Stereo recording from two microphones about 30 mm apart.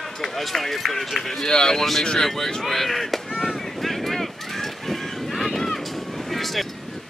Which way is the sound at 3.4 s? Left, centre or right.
Centre.